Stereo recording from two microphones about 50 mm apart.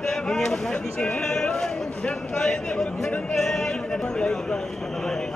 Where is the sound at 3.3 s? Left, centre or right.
Centre.